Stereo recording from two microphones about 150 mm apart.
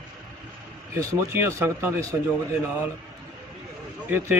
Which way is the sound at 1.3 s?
20° right (ahead or behind).